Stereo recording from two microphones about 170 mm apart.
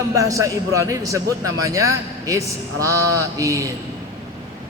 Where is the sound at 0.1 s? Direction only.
20° right (ahead or behind).